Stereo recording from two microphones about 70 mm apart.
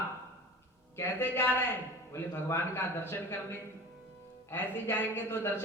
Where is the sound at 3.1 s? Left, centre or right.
Left.